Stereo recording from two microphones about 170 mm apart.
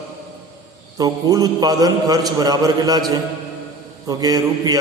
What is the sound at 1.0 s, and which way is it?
A man's voice, 20° right (ahead or behind).